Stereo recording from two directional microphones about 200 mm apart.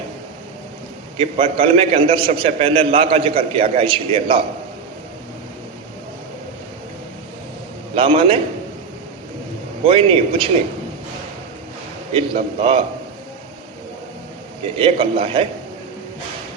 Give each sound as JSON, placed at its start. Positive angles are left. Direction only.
{"t": 1.1, "sound": "a man's voice", "side_deg": -30}
{"t": 7.9, "sound": "a man's voice", "side_deg": -30}
{"t": 9.8, "sound": "a man's voice", "side_deg": -30}
{"t": 12.1, "sound": "a man's voice", "side_deg": -30}
{"t": 14.8, "sound": "a man's voice", "side_deg": -25}